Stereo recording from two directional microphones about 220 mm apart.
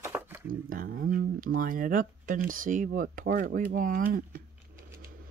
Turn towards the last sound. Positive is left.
turn(degrees=-40)  # may be behind; listen again after turning